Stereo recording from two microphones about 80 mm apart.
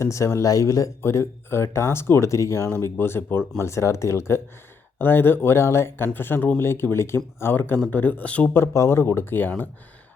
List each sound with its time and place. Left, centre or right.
0.0 s speech: left
1.0 s speech: left
2.6 s speech: left
8.5 s speech: left